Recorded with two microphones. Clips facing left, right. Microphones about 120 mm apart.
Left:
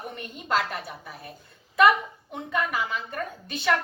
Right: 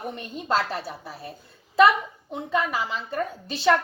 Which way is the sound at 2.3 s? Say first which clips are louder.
Right 3 dB; 25° right (ahead or behind).